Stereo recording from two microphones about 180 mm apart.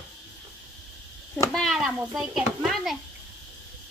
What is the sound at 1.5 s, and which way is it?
Speech, centre (ahead or behind).